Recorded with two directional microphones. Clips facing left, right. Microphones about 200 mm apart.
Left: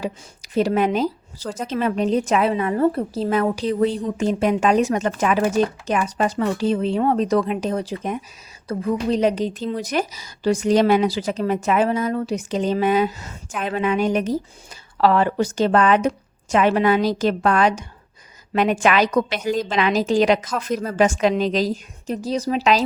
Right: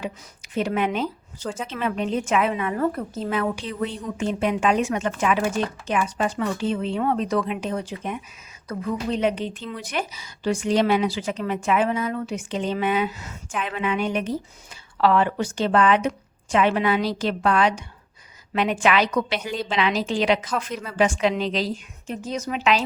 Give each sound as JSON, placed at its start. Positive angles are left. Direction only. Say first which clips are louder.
{"t": 0.0, "sound": "a woman's voice", "louder": "left 4 dB", "side_deg": 35}